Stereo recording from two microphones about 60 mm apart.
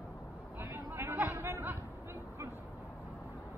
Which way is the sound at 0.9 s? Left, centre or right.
Right.